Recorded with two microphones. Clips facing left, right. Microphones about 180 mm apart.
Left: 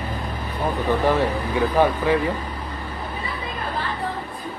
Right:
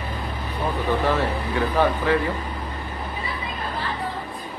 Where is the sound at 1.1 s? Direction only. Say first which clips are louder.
Left 2 dB; 15° left (ahead or behind).